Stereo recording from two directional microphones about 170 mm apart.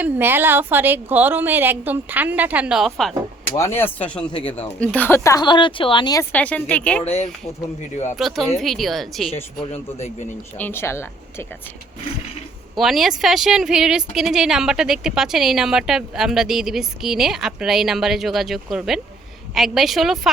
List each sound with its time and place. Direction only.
0.0 s a woman's voice: 10° right (ahead or behind)
3.5 s speech: 15° left (ahead or behind)
4.3 s speech: 30° left (ahead or behind)
4.8 s speech: 10° left (ahead or behind); by 6.2 s 25° left (ahead or behind)
6.3 s speech: 10° left (ahead or behind)
7.0 s speech: 40° left (ahead or behind)
8.1 s a woman's voice: centre (ahead or behind)
10.6 s speech: 15° left (ahead or behind)
12.7 s a woman's voice: centre (ahead or behind)